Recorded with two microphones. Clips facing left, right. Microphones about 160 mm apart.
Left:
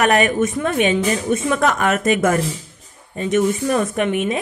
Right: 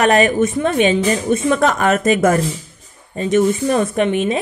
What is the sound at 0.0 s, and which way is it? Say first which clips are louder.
A woman's voice: right 3 dB; 30° right (ahead or behind).